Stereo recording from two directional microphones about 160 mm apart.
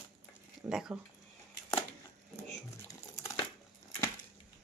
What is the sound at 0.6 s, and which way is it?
Speech, 5° right (ahead or behind).